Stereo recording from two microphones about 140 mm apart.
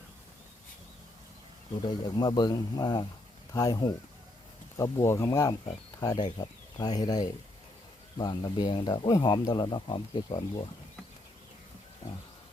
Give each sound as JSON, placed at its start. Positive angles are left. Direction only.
{"t": 1.8, "sound": "speech", "side_deg": 30}